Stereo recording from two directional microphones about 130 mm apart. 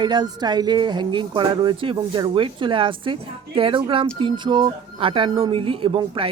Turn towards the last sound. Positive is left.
turn(degrees=-40)  # may be behind; listen again after turning